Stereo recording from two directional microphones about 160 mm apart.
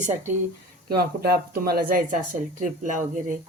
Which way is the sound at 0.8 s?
70° right (ahead or behind).